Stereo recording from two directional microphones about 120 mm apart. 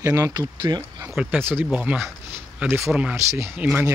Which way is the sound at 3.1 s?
20° right (ahead or behind).